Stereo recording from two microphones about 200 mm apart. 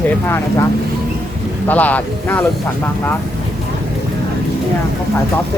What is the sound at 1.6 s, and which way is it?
Speech, 10° left (ahead or behind).